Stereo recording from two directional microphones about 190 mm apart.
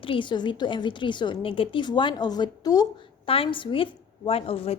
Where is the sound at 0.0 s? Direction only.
25° left (ahead or behind).